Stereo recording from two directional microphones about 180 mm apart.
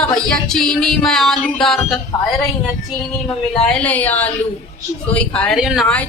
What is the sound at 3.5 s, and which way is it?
A woman's voice, 5° left (ahead or behind).